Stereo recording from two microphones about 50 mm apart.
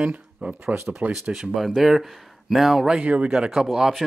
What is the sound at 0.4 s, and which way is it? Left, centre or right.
Speech, right.